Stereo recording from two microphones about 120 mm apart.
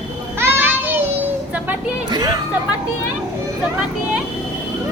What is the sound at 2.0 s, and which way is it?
Music, 35° right (ahead or behind).